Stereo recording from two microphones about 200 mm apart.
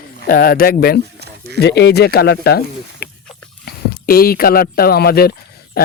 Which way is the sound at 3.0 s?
50° left (ahead or behind).